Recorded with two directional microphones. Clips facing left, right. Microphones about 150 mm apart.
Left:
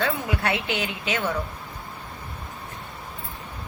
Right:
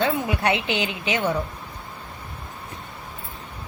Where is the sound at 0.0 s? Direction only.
20° right (ahead or behind).